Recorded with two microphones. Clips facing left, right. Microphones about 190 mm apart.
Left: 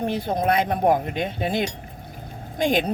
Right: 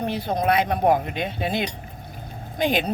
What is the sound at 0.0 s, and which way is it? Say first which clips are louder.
Speech: left 1 dB; 50° left (ahead or behind).